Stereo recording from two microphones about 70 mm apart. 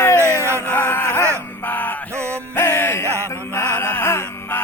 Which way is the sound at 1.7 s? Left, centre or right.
Left.